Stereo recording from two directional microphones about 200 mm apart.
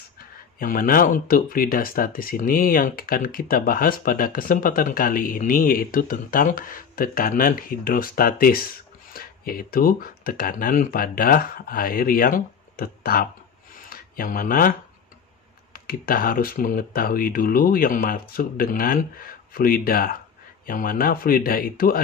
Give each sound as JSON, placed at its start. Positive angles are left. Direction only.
{"t": 0.2, "sound": "speech", "side_deg": 45}
{"t": 13.8, "sound": "a sound", "side_deg": 45}
{"t": 15.7, "sound": "speech", "side_deg": 45}